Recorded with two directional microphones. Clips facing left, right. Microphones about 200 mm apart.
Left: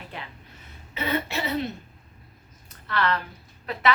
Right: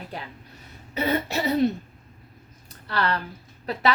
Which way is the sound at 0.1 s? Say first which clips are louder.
Right 3 dB; 35° right (ahead or behind).